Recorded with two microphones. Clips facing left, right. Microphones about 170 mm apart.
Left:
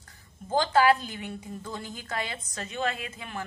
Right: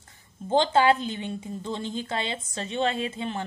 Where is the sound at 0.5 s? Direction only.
25° right (ahead or behind).